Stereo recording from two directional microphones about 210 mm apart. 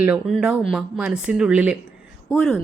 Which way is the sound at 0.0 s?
5° right (ahead or behind).